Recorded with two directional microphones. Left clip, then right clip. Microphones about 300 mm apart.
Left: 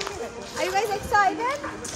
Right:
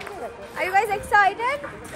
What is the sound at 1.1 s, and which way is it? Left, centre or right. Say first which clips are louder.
Children playing: right 3 dB; right.